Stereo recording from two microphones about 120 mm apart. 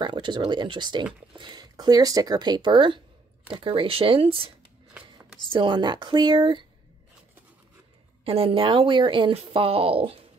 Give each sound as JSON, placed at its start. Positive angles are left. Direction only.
{"t": 0.0, "sound": "speech", "side_deg": -40}
{"t": 5.5, "sound": "speech", "side_deg": -40}
{"t": 8.2, "sound": "speech", "side_deg": -55}